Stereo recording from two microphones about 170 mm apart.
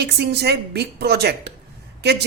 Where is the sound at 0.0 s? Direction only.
75° right (ahead or behind).